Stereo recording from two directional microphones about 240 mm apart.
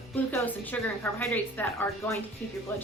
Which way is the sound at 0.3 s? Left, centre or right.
Centre.